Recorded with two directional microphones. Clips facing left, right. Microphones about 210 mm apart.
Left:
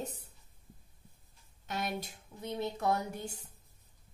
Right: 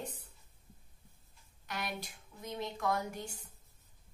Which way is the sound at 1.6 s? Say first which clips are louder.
Left 4 dB; 25° left (ahead or behind).